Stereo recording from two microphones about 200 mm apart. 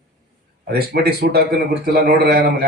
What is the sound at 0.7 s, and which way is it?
Speech, 50° right (ahead or behind).